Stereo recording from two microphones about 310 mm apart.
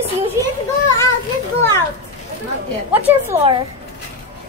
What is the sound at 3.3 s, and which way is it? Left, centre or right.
Speech, centre.